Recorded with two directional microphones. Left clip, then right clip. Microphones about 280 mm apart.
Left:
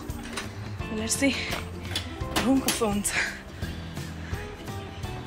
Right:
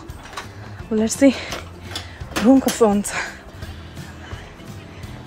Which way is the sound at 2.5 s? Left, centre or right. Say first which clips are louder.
Right 12 dB; right.